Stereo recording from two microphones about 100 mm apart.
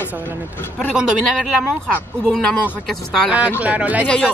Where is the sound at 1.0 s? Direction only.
5° right (ahead or behind).